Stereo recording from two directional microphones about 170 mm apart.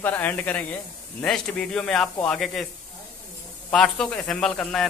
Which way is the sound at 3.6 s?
5° left (ahead or behind).